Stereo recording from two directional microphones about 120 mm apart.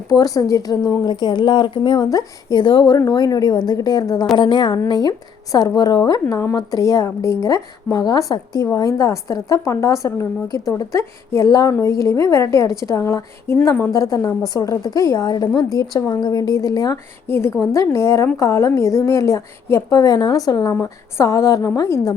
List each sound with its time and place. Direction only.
0.1 s a woman's voice: 30° left (ahead or behind)